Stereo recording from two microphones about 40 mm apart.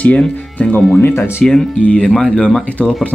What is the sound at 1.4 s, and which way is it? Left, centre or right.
Music, centre.